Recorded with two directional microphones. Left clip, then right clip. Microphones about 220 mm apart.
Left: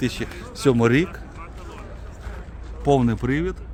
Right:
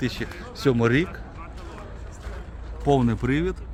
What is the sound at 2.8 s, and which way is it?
Speech, 15° left (ahead or behind).